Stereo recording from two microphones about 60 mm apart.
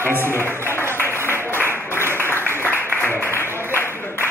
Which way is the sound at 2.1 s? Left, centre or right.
Left.